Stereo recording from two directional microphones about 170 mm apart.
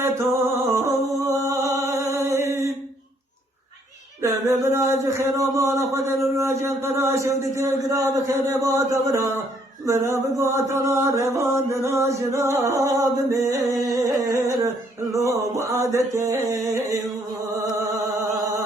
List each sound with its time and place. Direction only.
0.4 s a sound: 15° right (ahead or behind)
4.2 s speech: 15° right (ahead or behind)
17.6 s music: 20° right (ahead or behind)